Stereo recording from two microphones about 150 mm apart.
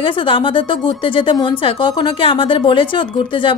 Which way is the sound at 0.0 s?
35° left (ahead or behind).